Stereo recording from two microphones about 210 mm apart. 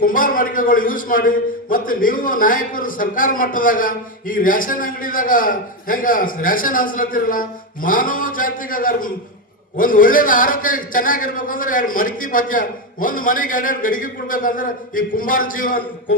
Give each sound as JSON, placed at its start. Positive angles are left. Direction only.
{"t": 0.0, "sound": "a man's voice", "side_deg": 40}